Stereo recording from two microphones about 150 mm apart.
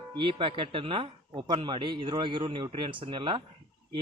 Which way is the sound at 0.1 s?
35° right (ahead or behind).